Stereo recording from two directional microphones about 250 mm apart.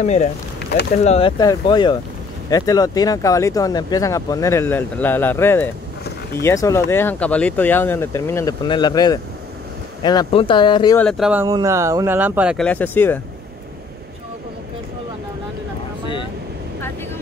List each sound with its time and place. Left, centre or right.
0.0 s speech: left
11.0 s speech: centre